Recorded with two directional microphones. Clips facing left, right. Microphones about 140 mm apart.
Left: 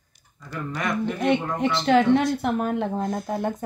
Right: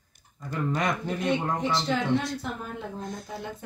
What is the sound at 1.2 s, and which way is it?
Speech, 65° left (ahead or behind).